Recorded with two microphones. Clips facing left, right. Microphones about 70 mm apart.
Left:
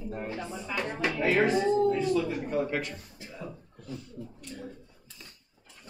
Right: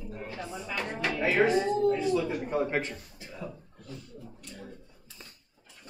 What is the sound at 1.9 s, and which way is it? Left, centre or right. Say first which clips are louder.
Speech: even; centre.